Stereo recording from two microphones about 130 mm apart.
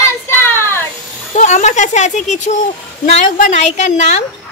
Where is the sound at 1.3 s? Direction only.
70° left (ahead or behind).